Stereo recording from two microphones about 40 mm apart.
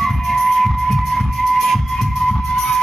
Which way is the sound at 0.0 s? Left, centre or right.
Centre.